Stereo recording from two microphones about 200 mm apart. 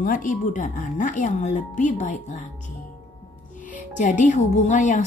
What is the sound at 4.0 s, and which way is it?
A woman's voice, 40° left (ahead or behind).